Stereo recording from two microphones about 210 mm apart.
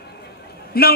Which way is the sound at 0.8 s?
45° left (ahead or behind).